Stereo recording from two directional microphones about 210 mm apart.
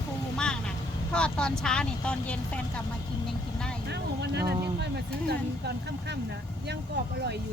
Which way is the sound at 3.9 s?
55° right (ahead or behind).